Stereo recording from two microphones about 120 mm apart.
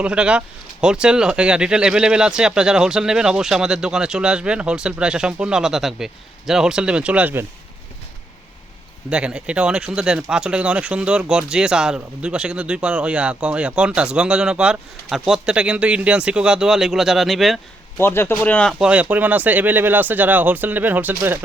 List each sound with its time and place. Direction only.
0.0 s speech: 10° right (ahead or behind)
9.0 s speech: 10° right (ahead or behind)
17.9 s speech: 20° left (ahead or behind)
18.7 s speech: 5° right (ahead or behind)